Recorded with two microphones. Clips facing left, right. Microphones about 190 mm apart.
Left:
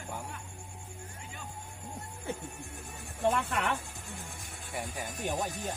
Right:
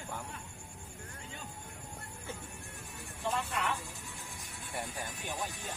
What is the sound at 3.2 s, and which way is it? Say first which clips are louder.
Music: left 6 dB; 55° left (ahead or behind).